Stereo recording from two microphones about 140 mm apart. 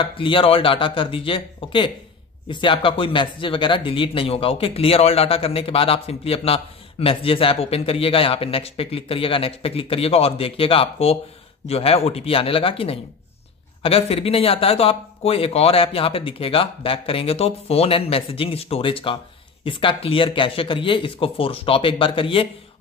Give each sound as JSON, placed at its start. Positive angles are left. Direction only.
{"t": 0.0, "sound": "speech", "side_deg": 35}